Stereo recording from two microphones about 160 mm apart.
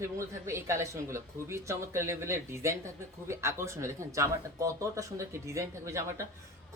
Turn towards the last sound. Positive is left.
turn(degrees=-20)  # may be behind; listen again after turning